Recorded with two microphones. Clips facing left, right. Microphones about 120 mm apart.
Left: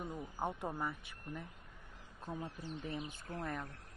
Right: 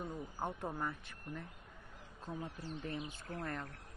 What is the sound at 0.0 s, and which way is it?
Speech, 5° left (ahead or behind).